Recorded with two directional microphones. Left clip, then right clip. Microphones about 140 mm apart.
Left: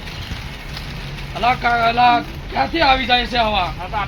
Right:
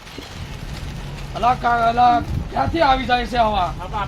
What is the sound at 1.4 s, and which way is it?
Speech, 15° right (ahead or behind).